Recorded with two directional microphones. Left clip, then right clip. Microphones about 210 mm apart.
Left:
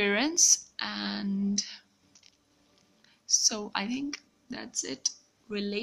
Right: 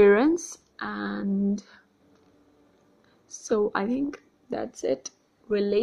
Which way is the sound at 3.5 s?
20° right (ahead or behind).